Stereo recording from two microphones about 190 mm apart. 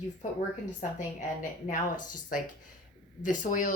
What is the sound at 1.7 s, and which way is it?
Speech, 45° left (ahead or behind).